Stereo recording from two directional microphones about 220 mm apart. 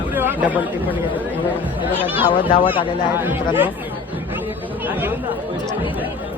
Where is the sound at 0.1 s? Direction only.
10° right (ahead or behind).